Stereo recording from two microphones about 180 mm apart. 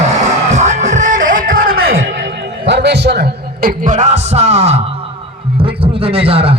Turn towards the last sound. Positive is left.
turn(degrees=-30)  # may be behind; listen again after turning